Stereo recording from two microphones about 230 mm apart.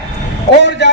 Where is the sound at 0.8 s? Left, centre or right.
Left.